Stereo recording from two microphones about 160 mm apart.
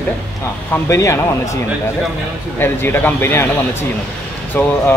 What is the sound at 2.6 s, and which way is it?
Speech, 15° left (ahead or behind).